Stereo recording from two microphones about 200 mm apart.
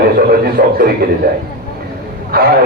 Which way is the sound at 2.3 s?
50° right (ahead or behind).